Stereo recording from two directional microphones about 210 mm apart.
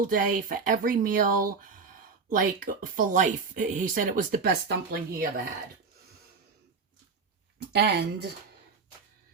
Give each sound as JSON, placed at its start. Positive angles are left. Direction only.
{"t": 0.0, "sound": "speech", "side_deg": -40}
{"t": 7.7, "sound": "speech", "side_deg": -50}